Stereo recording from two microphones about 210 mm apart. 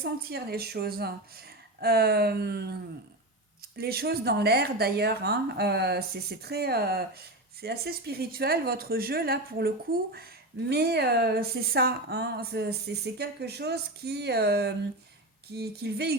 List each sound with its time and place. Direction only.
0.0 s speech: 50° right (ahead or behind)
3.8 s speech: 50° right (ahead or behind)